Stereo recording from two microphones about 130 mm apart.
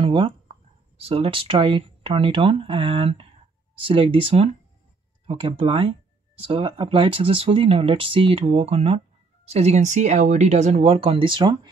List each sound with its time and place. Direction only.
0.0 s speech: 40° right (ahead or behind)